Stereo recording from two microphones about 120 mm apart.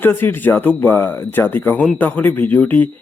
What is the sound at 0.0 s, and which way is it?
A man's voice, 15° left (ahead or behind).